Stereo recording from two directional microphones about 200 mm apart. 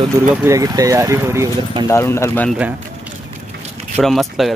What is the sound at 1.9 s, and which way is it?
Speech, 15° left (ahead or behind).